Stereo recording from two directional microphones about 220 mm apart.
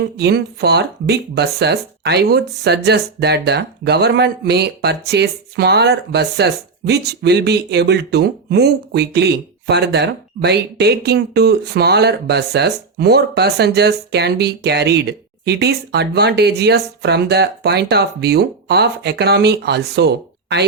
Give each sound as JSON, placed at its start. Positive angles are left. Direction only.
{"t": 0.0, "sound": "speech", "side_deg": -45}